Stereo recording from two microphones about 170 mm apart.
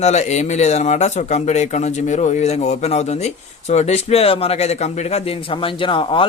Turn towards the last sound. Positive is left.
turn(degrees=30)  # may be behind; listen again after turning